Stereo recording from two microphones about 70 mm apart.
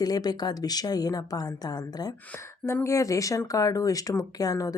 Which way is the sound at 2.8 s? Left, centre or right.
Left.